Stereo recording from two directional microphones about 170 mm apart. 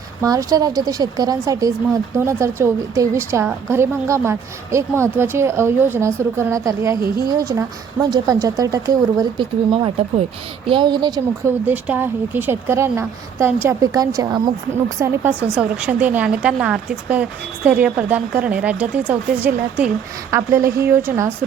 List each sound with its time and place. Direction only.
0.2 s a woman's voice: 20° right (ahead or behind)
11.6 s a woman's voice: 10° right (ahead or behind)